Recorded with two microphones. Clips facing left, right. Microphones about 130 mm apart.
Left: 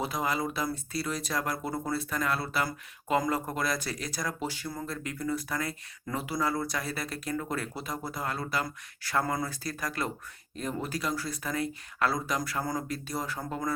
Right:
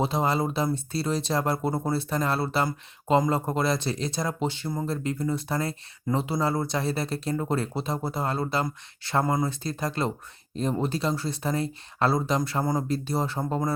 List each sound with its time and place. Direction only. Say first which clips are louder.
0.0 s speech: right 6 dB; 30° right (ahead or behind)